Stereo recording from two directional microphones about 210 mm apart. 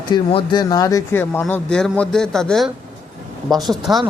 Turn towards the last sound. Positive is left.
turn(degrees=0)  # may be behind; listen again after turning